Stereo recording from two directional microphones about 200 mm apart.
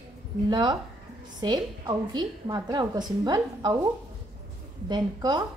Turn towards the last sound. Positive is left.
turn(degrees=-20)  # may be behind; listen again after turning